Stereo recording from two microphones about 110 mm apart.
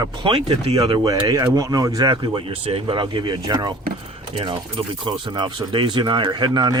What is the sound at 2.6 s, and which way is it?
Speech, 65° right (ahead or behind).